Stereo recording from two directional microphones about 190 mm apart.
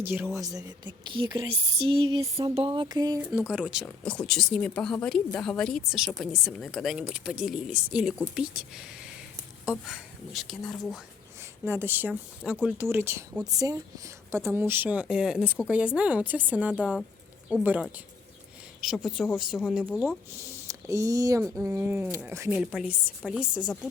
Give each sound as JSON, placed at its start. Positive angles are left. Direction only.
{"t": 0.0, "sound": "speech", "side_deg": -10}
{"t": 1.1, "sound": "a sound", "side_deg": -20}
{"t": 3.2, "sound": "speech", "side_deg": -5}
{"t": 11.6, "sound": "speech", "side_deg": -10}
{"t": 19.0, "sound": "speech", "side_deg": 0}
{"t": 20.7, "sound": "speech", "side_deg": -15}